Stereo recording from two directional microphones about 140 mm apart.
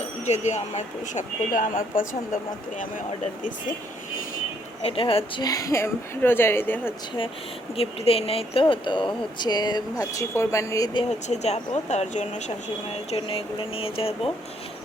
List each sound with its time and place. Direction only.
0.3 s speech: 55° left (ahead or behind); by 2.8 s 75° left (ahead or behind)
4.8 s speech: 40° left (ahead or behind); by 6.9 s 15° left (ahead or behind)
7.8 s speech: 45° left (ahead or behind); by 11.0 s 25° left (ahead or behind)
11.3 s speech: 50° left (ahead or behind)